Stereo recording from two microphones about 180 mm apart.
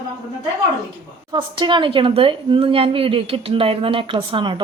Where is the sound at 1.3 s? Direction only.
25° right (ahead or behind).